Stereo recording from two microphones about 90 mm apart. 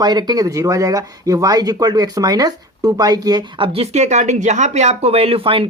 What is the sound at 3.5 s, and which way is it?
Speech, 80° right.